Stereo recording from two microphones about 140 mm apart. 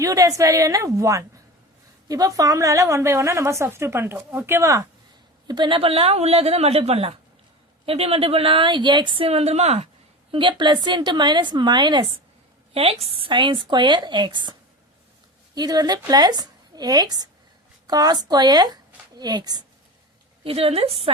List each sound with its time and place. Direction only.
0.0 s a woman's voice: 25° right (ahead or behind)
5.5 s a woman's voice: 35° right (ahead or behind); by 9.9 s 50° right (ahead or behind)
10.3 s a woman's voice: 35° right (ahead or behind)
12.7 s a woman's voice: 45° right (ahead or behind)
15.5 s a woman's voice: 30° right (ahead or behind)
20.4 s a woman's voice: 45° right (ahead or behind)